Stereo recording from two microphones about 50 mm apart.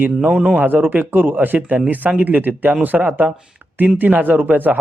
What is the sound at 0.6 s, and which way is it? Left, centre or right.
Speech, right.